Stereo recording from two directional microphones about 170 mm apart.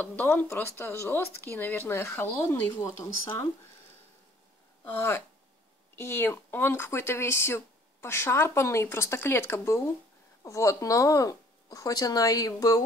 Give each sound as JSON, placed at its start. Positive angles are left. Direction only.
{"t": 0.0, "sound": "speech", "side_deg": 10}
{"t": 4.9, "sound": "speech", "side_deg": 15}